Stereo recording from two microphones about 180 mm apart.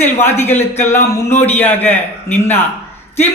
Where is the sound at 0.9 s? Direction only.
40° left (ahead or behind).